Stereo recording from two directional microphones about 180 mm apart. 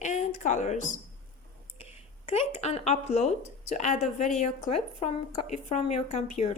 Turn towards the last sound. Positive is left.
turn(degrees=40)  # may be behind; listen again after turning